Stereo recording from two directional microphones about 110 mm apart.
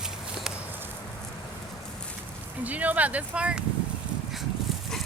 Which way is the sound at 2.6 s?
15° right (ahead or behind).